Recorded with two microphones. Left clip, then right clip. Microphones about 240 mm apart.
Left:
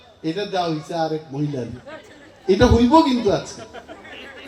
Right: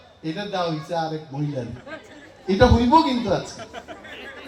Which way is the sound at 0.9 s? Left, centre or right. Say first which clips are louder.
Left 2 dB; left.